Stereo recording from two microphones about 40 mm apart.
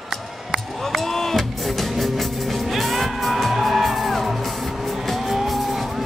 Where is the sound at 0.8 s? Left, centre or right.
Centre.